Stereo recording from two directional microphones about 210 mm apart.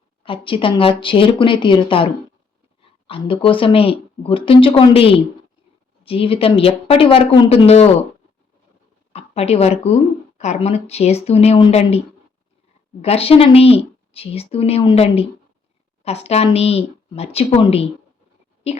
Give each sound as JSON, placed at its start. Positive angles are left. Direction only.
{"t": 0.2, "sound": "a woman's voice", "side_deg": 25}
{"t": 9.1, "sound": "a woman's voice", "side_deg": 30}